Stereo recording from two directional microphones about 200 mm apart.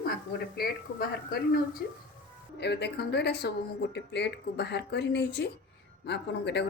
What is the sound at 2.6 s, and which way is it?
A woman's voice, 55° left (ahead or behind).